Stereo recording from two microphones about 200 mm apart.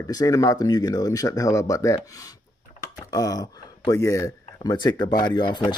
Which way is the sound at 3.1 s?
20° left (ahead or behind).